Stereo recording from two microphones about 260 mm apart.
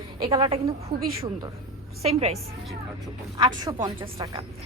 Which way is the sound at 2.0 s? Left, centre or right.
Right.